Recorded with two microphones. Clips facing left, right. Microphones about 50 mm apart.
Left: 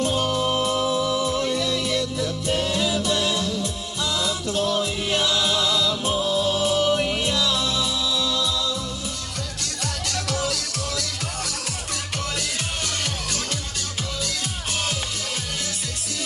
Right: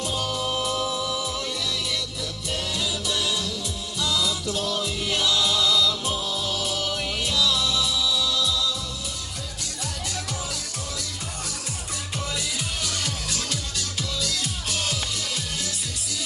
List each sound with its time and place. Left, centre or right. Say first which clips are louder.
0.0 s music: left 6 dB; left
0.3 s music: left 4 dB; left
1.4 s music: left 6 dB; left
10.1 s music: left 9 dB; left